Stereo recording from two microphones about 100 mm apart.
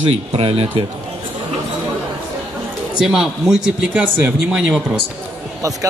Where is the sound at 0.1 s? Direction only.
80° right.